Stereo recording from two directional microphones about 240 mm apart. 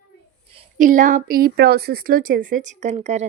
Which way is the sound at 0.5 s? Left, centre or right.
Right.